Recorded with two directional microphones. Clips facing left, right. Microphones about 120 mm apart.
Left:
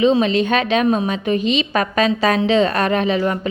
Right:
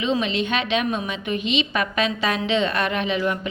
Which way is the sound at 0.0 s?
35° left (ahead or behind).